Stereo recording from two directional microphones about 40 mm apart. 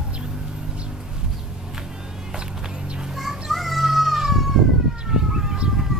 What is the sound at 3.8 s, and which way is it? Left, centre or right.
Cat, centre.